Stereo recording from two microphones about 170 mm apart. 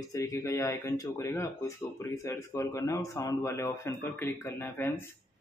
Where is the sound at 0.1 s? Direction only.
20° left (ahead or behind).